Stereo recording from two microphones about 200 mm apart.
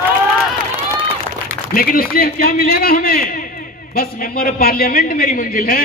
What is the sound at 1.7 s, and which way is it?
A man's voice, 45° left (ahead or behind).